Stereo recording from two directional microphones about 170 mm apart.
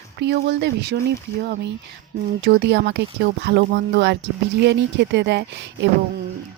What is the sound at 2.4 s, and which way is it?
Speech, 85° right.